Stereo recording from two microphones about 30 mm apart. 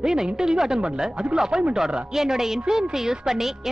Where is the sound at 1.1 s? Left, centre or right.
Right.